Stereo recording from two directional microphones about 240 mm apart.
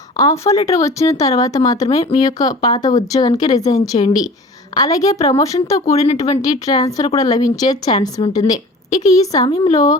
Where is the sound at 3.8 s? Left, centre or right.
Left.